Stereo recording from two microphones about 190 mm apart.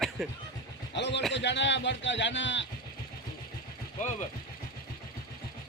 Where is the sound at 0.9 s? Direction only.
65° left (ahead or behind).